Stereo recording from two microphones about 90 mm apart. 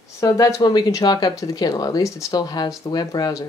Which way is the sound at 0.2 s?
35° left (ahead or behind).